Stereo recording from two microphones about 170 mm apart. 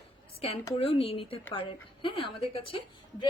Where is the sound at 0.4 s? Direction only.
35° left (ahead or behind).